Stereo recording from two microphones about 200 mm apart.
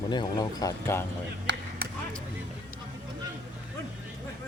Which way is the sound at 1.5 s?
60° right (ahead or behind).